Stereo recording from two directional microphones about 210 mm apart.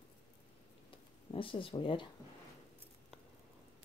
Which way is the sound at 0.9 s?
25° left (ahead or behind).